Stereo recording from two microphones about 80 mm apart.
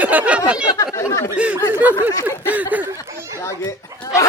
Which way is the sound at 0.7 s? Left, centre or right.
Left.